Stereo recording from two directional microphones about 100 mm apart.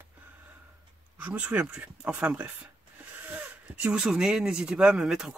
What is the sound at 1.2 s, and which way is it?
Speech, 15° right (ahead or behind).